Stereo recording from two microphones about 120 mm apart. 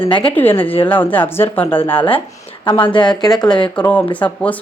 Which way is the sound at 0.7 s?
40° left (ahead or behind).